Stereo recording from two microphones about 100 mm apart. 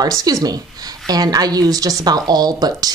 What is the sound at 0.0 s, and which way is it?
A woman's voice, 35° right (ahead or behind).